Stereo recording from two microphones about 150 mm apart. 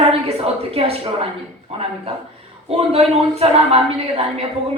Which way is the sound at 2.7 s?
40° right (ahead or behind).